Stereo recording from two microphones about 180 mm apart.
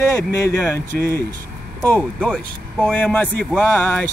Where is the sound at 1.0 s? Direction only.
55° right (ahead or behind).